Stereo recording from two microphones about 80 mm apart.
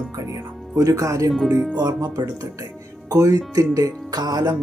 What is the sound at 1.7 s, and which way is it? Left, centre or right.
Speech, right.